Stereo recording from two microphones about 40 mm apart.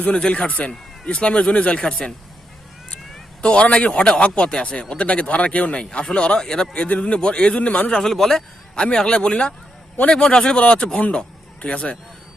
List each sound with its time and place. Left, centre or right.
0.3 s speech: left
1.8 s speech: centre
3.4 s a man's voice: left
6.7 s speech: left
7.9 s a man's voice: centre
8.7 s a man's voice: left